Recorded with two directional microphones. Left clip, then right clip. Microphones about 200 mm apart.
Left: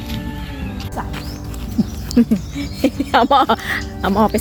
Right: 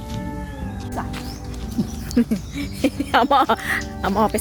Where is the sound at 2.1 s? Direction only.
Centre (ahead or behind).